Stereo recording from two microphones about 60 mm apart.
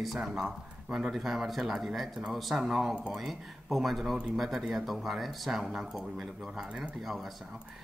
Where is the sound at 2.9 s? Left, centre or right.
Centre.